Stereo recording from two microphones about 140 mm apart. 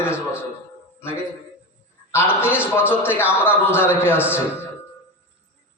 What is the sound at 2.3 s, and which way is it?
A man's voice, 15° left (ahead or behind).